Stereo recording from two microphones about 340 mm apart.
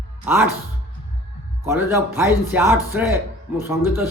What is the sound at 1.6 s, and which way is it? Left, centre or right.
Speech, centre.